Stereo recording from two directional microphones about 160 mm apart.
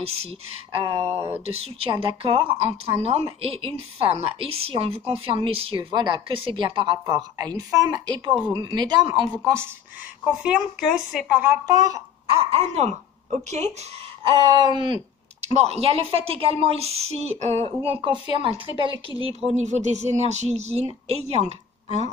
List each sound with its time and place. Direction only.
0.0 s a woman's voice: 35° right (ahead or behind)
9.4 s speech: 15° right (ahead or behind)
10.4 s speech: 5° right (ahead or behind)
11.6 s a sound: 20° right (ahead or behind)
12.3 s speech: 40° right (ahead or behind)
14.3 s a sound: 25° right (ahead or behind)
15.4 s a woman's voice: 40° right (ahead or behind)